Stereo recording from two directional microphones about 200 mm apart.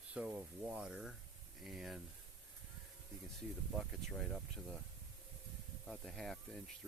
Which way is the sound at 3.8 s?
Centre (ahead or behind).